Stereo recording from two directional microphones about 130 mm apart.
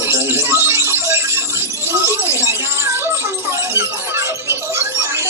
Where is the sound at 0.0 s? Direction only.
20° right (ahead or behind).